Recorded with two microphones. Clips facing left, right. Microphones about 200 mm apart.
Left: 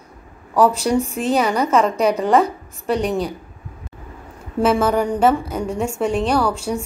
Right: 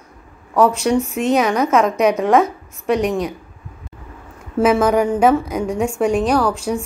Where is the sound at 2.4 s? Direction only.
30° left (ahead or behind).